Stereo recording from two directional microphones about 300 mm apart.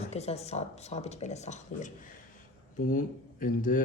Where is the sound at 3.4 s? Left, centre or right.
Left.